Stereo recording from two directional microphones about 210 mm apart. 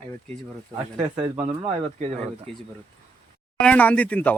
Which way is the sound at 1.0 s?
30° right (ahead or behind).